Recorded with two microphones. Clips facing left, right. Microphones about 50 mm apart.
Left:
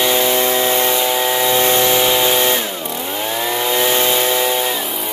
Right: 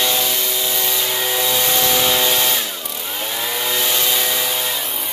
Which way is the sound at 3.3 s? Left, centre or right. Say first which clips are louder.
Left 5 dB; centre.